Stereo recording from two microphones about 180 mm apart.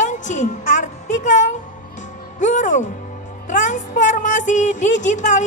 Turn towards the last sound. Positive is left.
turn(degrees=45)  # may be behind; listen again after turning